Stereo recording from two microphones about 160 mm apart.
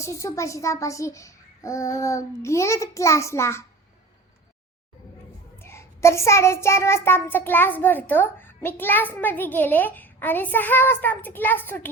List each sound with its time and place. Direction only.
0.0 s a child's voice: 20° left (ahead or behind)
5.5 s child singing: 15° left (ahead or behind)